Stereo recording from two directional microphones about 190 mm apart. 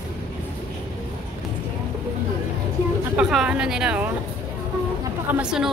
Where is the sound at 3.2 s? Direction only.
5° right (ahead or behind).